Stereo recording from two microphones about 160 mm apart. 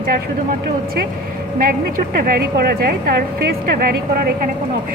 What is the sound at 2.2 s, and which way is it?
Speech, 70° right (ahead or behind).